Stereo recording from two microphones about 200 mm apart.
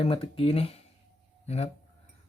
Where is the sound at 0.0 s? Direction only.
30° left (ahead or behind).